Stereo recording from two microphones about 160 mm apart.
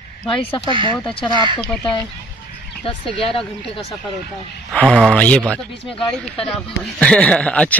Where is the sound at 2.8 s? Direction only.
35° left (ahead or behind).